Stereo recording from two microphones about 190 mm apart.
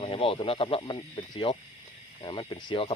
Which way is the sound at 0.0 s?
30° left (ahead or behind).